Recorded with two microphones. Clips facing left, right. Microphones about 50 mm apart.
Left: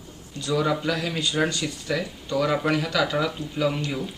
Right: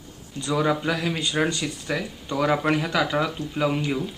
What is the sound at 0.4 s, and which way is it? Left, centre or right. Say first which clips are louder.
Speech: right 1 dB; centre.